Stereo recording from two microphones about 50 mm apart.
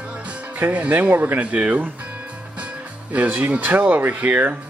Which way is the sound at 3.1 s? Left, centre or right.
Right.